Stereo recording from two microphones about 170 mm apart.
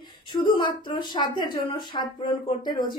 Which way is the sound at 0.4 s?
30° left (ahead or behind).